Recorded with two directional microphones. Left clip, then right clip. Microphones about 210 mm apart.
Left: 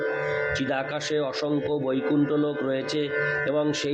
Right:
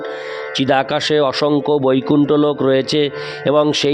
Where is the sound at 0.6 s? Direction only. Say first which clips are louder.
Right 12 dB; 55° right (ahead or behind).